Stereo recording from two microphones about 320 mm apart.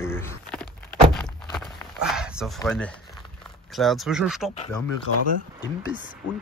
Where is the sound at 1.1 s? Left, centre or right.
Centre.